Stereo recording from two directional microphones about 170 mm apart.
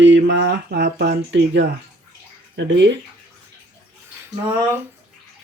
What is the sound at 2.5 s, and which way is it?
Speech, 90° right.